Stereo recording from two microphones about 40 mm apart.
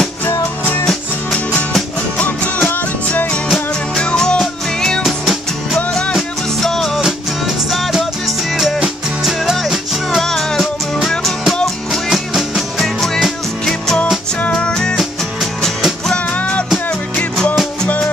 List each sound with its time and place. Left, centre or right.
2.1 s music: left
3.9 s music: centre
5.0 s music: centre
7.0 s music: centre
9.6 s music: centre
12.8 s music: centre
14.7 s music: centre
16.3 s music: left